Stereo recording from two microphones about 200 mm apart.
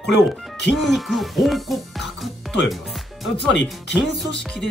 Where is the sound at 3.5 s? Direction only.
60° left (ahead or behind).